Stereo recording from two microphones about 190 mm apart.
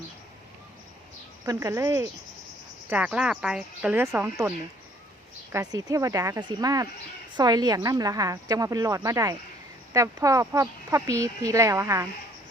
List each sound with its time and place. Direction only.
1.5 s speech: 15° right (ahead or behind)
2.9 s a woman's voice: 5° right (ahead or behind)